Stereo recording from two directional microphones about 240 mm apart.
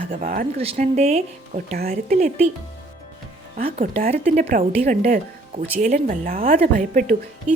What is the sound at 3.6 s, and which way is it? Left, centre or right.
A woman's voice, right.